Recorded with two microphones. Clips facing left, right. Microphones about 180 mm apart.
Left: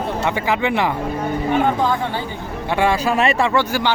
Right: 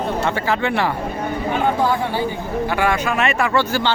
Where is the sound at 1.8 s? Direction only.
10° right (ahead or behind).